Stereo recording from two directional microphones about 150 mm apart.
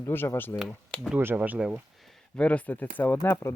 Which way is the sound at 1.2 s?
15° right (ahead or behind).